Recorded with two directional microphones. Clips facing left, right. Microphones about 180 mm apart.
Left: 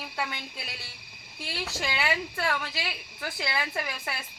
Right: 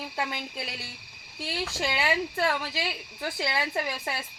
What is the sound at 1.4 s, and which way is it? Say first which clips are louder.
A woman's voice: right 3 dB; 30° right (ahead or behind).